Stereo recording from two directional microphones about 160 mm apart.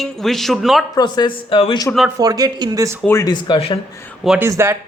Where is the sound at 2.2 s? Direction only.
25° right (ahead or behind).